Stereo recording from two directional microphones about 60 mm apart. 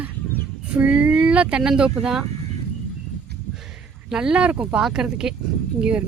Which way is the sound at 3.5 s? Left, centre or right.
Centre.